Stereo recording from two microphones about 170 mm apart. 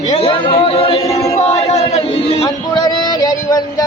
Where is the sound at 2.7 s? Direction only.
25° left (ahead or behind).